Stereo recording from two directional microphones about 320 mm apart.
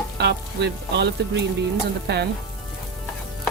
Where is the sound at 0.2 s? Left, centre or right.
Right.